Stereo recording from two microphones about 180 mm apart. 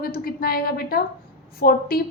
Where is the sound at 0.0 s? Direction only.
55° left (ahead or behind).